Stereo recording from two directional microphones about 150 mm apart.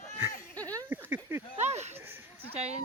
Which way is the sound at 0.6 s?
10° left (ahead or behind).